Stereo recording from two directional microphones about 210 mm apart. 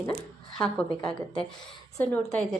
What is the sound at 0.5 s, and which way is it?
A woman's voice, 5° left (ahead or behind).